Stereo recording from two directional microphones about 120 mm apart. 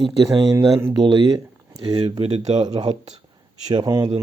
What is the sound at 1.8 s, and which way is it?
Speech, 50° right (ahead or behind).